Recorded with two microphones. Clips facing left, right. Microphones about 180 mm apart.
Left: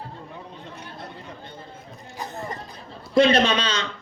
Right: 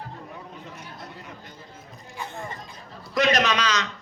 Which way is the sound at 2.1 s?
40° left (ahead or behind).